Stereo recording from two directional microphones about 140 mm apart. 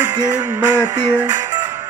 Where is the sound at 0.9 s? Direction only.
30° right (ahead or behind).